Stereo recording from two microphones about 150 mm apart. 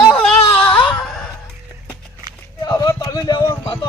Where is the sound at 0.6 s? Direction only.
10° left (ahead or behind).